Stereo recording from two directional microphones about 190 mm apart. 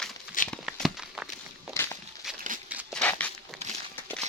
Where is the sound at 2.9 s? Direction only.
5° left (ahead or behind).